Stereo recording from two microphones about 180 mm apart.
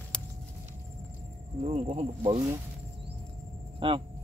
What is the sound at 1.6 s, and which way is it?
Speech, 35° right (ahead or behind).